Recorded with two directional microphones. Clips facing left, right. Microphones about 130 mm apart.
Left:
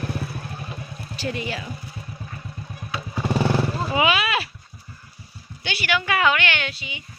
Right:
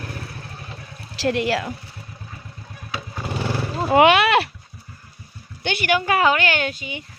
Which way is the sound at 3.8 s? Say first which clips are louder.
Right 11 dB; 60° right (ahead or behind).